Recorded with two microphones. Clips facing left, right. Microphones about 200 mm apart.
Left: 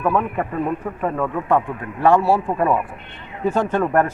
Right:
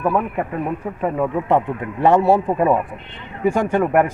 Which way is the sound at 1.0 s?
15° right (ahead or behind).